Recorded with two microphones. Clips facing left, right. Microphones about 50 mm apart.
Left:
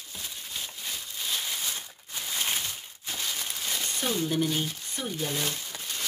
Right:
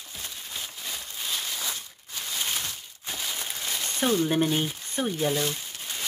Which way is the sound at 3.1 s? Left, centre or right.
Centre.